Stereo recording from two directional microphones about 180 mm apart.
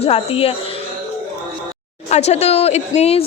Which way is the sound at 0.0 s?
35° left (ahead or behind).